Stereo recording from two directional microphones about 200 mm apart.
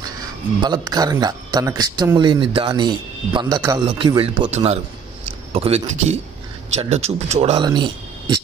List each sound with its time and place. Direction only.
0.6 s speech: 20° right (ahead or behind)